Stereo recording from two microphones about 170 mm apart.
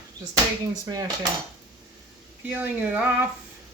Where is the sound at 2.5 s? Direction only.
10° right (ahead or behind).